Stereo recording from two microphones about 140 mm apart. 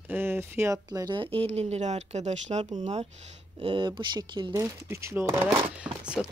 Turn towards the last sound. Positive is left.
turn(degrees=0)  # may be behind; listen again after turning